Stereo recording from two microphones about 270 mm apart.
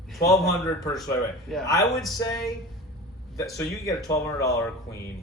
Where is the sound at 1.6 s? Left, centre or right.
Centre.